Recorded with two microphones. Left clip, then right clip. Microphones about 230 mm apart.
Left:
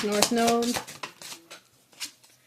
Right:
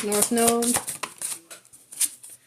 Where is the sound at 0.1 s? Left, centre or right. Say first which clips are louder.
Right 2 dB; right.